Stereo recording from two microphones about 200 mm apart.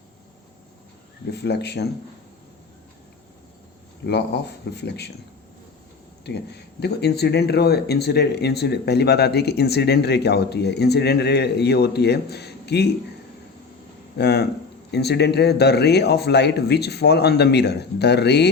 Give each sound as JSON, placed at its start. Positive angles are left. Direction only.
{"t": 1.3, "sound": "speech", "side_deg": 55}
{"t": 4.0, "sound": "speech", "side_deg": 55}
{"t": 6.2, "sound": "speech", "side_deg": 55}
{"t": 14.2, "sound": "speech", "side_deg": 55}